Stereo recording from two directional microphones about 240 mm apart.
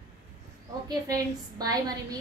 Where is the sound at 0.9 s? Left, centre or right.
Centre.